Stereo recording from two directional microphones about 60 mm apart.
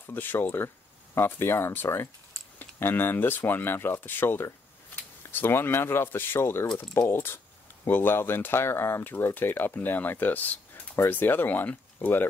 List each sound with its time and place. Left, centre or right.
0.0 s speech: left